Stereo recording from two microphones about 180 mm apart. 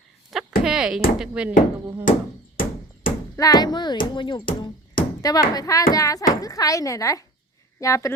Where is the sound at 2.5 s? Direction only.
50° left (ahead or behind).